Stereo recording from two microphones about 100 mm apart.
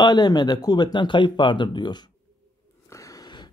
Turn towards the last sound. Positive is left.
turn(degrees=45)  # may be behind; listen again after turning